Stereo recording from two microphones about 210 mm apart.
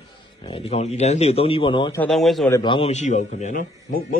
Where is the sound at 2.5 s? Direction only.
25° left (ahead or behind); by 4.2 s 40° left (ahead or behind).